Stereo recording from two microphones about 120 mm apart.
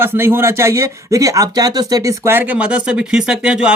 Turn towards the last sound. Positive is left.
turn(degrees=-5)  # may be behind; listen again after turning